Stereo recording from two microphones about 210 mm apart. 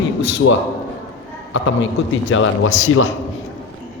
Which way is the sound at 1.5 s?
65° left (ahead or behind).